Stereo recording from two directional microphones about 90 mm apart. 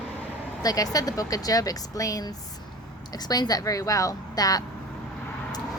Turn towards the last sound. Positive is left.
turn(degrees=45)  # may be behind; listen again after turning